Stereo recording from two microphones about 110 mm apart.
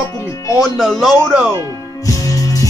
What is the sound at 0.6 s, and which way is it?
Speech, centre (ahead or behind).